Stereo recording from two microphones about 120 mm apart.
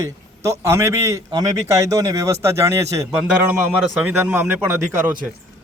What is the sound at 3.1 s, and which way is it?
A man's voice, 10° right (ahead or behind).